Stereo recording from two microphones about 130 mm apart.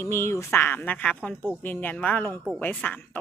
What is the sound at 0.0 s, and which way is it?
A woman's voice, 20° left (ahead or behind).